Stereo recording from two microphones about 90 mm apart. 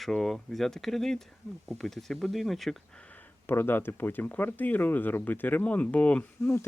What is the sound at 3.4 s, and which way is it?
Speech, 25° left (ahead or behind).